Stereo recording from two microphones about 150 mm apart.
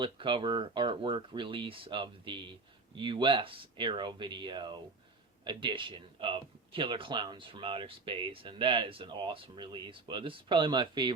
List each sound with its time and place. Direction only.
0.0 s speech: 35° right (ahead or behind)